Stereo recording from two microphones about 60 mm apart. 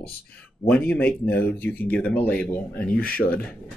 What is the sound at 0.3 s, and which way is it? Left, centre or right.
Speech, left.